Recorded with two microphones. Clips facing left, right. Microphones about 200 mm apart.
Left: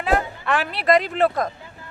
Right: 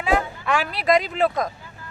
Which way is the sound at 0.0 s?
Centre (ahead or behind).